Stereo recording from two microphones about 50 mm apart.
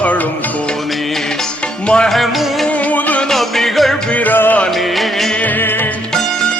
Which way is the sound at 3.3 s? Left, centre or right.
Centre.